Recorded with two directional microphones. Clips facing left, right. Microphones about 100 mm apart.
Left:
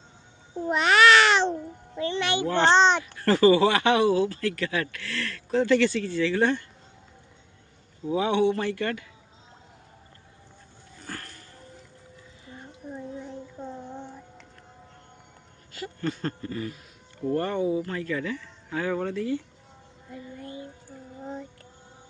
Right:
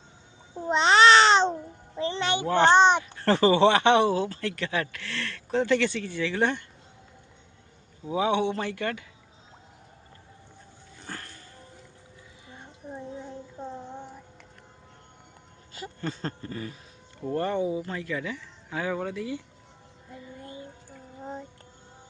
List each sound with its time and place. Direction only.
0.7 s babbling: 25° right (ahead or behind)
2.0 s a sound: 30° right (ahead or behind)
2.3 s a child's voice: 20° right (ahead or behind)
8.0 s speech: 15° right (ahead or behind)
11.0 s dog: 20° right (ahead or behind)
12.5 s a sound: 20° right (ahead or behind)
15.7 s speech: 20° right (ahead or behind)
20.3 s music: 25° right (ahead or behind)